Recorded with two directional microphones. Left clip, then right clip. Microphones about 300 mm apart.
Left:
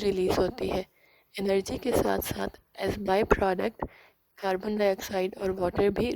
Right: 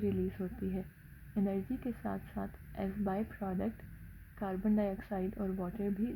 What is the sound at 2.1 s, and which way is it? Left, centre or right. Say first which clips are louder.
A woman's voice: left 13 dB; left.